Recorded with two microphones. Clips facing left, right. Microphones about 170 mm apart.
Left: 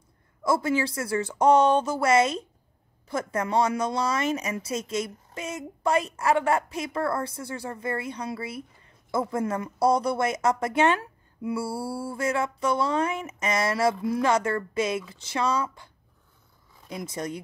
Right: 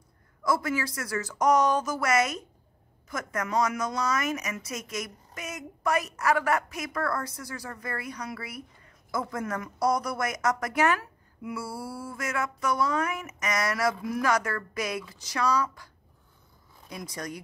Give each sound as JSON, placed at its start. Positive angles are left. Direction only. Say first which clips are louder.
{"t": 0.4, "sound": "speech", "louder": "left 3 dB", "side_deg": 25}
{"t": 16.9, "sound": "speech", "louder": "left 5 dB", "side_deg": 25}